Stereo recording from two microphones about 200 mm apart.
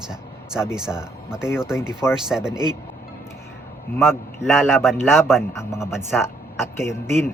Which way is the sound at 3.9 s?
10° left (ahead or behind).